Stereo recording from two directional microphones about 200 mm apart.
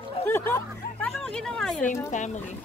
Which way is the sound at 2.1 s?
35° left (ahead or behind).